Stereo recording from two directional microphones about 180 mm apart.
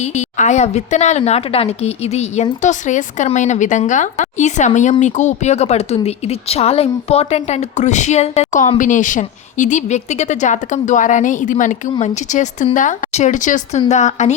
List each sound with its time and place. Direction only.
0.0 s a woman's voice: 40° left (ahead or behind)